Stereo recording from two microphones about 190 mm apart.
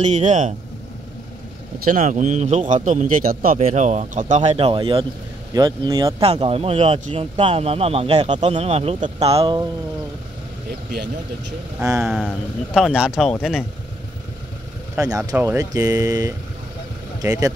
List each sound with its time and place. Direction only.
0.0 s speech: 40° right (ahead or behind)
1.9 s speech: 40° right (ahead or behind)
4.4 s speech: 30° right (ahead or behind)
6.2 s speech: 30° right (ahead or behind)
11.8 s speech: 15° right (ahead or behind)
12.1 s speech: centre (ahead or behind)
15.0 s speech: 20° right (ahead or behind)